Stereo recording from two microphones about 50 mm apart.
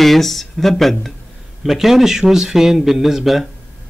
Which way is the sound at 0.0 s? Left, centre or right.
Centre.